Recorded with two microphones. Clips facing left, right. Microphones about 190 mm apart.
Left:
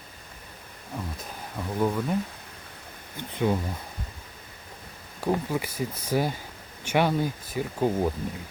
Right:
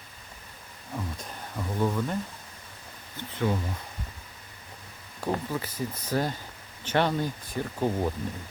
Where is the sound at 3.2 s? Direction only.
15° left (ahead or behind).